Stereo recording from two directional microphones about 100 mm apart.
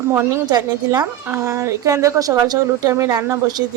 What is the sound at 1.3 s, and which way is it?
Speech, 30° right (ahead or behind).